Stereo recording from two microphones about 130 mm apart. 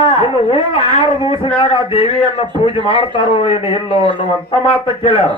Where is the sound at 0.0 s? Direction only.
45° left (ahead or behind).